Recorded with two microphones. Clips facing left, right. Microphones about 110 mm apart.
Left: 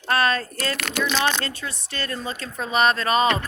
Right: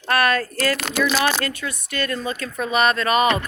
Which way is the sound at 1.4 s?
30° left (ahead or behind).